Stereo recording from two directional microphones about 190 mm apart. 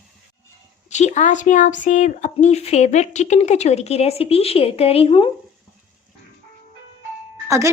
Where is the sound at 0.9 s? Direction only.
40° left (ahead or behind).